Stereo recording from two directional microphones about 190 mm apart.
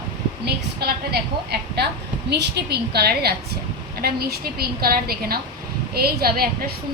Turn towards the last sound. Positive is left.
turn(degrees=-55)  # may be behind; listen again after turning